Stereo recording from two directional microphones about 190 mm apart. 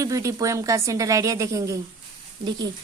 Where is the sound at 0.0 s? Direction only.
15° right (ahead or behind).